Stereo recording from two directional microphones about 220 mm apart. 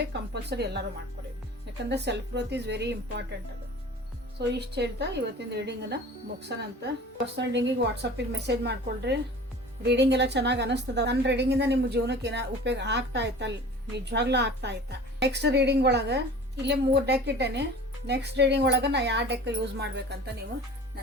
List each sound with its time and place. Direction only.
0.1 s a sound: 50° right (ahead or behind)
0.5 s a woman's voice: 50° right (ahead or behind)
1.9 s a woman's voice: 50° right (ahead or behind)
4.4 s a woman's voice: 50° right (ahead or behind)